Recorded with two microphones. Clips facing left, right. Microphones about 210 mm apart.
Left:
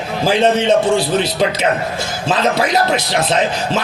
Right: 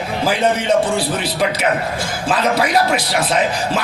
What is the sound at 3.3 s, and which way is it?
Speech, 25° left (ahead or behind).